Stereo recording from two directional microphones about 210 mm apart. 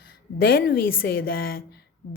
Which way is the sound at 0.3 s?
45° left (ahead or behind).